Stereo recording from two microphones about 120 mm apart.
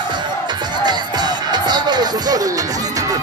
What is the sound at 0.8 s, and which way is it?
Music, 35° right (ahead or behind).